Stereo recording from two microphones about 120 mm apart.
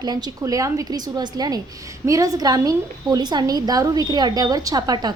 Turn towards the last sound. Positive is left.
turn(degrees=-35)  # may be behind; listen again after turning